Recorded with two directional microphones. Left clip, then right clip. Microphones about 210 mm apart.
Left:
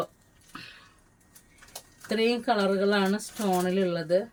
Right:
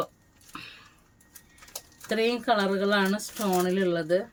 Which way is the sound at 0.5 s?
20° right (ahead or behind).